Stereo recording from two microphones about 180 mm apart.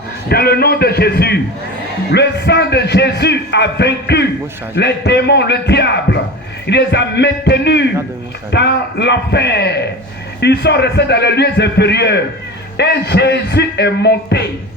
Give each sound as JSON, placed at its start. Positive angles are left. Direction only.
{"t": 0.3, "sound": "a man's voice", "side_deg": 60}